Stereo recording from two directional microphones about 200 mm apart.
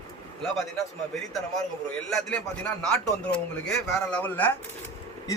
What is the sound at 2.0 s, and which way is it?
Speech, 5° left (ahead or behind).